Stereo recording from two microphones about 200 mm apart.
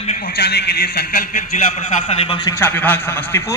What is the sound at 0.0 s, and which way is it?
A man's voice, 40° left (ahead or behind).